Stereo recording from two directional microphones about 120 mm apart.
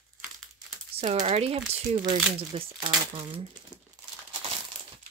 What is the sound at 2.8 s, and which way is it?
Speech, 35° right (ahead or behind).